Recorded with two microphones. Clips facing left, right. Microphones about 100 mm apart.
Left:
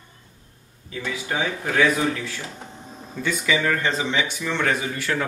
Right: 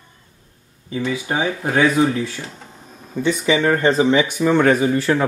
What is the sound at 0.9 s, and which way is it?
Speech, 25° right (ahead or behind).